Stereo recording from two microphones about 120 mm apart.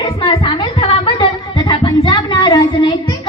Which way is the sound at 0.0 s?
45° left (ahead or behind).